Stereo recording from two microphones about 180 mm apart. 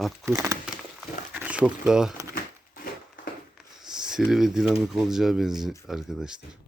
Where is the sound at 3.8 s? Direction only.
5° right (ahead or behind).